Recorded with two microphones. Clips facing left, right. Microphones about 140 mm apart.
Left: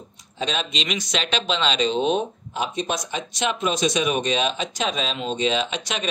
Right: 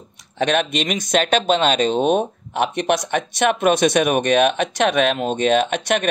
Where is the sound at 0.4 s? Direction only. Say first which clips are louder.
Right 8 dB; 60° right (ahead or behind).